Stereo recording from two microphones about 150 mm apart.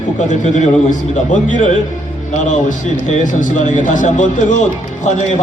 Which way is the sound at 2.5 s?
55° left (ahead or behind).